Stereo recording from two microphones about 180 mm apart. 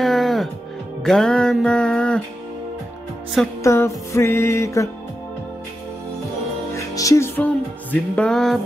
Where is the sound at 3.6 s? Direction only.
15° left (ahead or behind).